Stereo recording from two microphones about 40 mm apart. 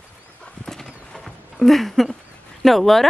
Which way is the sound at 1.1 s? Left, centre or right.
Centre.